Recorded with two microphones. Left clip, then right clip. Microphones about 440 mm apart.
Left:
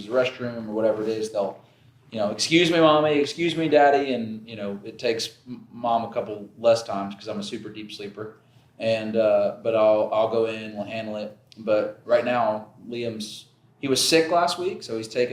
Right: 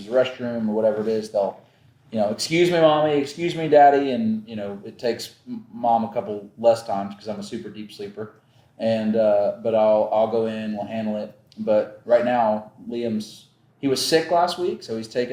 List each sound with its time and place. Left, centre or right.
0.0 s speech: right